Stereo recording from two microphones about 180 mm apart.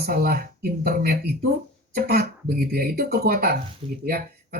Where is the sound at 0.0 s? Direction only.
55° right (ahead or behind).